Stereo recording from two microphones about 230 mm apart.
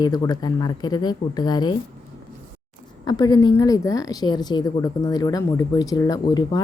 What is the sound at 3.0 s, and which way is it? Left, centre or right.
A woman's voice, centre.